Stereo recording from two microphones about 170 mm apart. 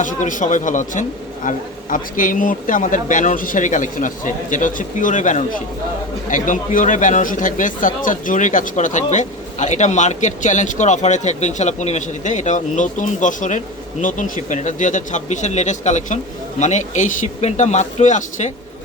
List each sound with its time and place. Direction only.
0.0 s speech: 50° left (ahead or behind)